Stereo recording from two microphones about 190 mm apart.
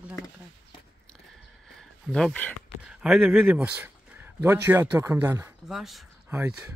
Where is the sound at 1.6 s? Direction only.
5° left (ahead or behind).